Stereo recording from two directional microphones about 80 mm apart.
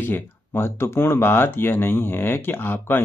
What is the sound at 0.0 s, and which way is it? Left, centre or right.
Speech, left.